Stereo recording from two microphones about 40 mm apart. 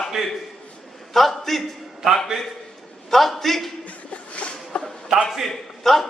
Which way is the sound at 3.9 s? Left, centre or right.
Left.